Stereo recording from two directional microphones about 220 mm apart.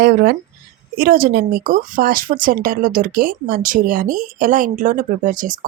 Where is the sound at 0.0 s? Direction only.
40° right (ahead or behind).